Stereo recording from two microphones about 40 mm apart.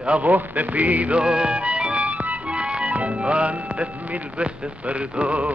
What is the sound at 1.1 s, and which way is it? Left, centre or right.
Speech, right.